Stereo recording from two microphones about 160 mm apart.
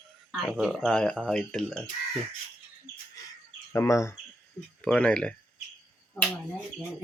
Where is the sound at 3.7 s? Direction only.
15° left (ahead or behind).